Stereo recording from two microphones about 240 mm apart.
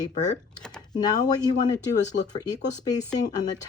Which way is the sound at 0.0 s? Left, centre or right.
Left.